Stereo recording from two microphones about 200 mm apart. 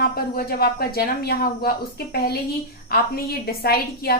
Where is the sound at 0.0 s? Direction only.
50° left (ahead or behind).